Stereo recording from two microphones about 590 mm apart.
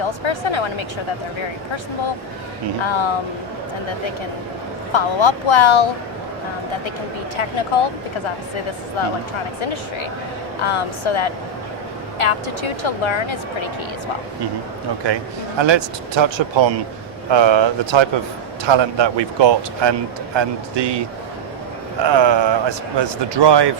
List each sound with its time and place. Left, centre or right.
0.3 s a woman's voice: left
2.8 s a woman's voice: left
4.9 s speech: left
10.6 s a woman's voice: left
15.0 s a man's voice: right
22.0 s a man's voice: right